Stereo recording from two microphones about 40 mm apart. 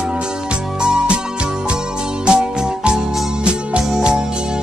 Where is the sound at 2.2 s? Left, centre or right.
Right.